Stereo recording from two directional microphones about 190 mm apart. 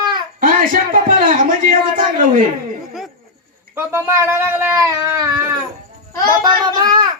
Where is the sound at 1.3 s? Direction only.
45° right (ahead or behind).